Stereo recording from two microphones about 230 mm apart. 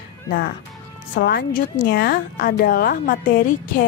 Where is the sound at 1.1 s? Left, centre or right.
Left.